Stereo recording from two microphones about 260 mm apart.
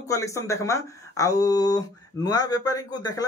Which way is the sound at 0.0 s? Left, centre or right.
Centre.